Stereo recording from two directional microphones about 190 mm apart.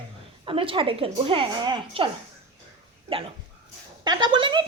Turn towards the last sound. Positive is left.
turn(degrees=-25)  # may be behind; listen again after turning